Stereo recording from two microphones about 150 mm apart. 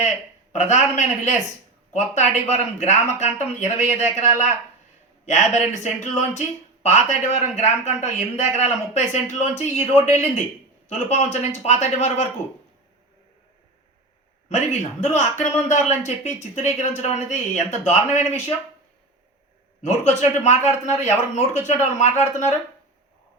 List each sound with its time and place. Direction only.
0.5 s a man's voice: 50° left (ahead or behind)
14.5 s a man's voice: 50° left (ahead or behind)
19.8 s a man's voice: 50° left (ahead or behind)